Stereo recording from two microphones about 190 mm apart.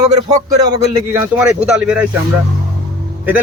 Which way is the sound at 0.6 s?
20° right (ahead or behind).